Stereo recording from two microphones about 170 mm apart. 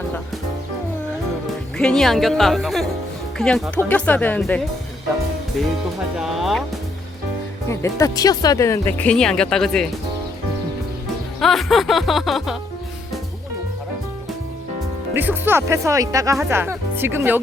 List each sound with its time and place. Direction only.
1.8 s music: 5° left (ahead or behind)
3.3 s speech: 5° left (ahead or behind)
6.1 s music: centre (ahead or behind)
7.7 s speech: 15° left (ahead or behind)
9.0 s music: 5° left (ahead or behind)
11.3 s music: centre (ahead or behind)
15.1 s speech: 10° right (ahead or behind)